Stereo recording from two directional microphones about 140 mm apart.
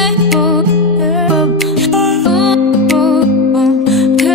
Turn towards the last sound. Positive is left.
turn(degrees=0)  # may be behind; listen again after turning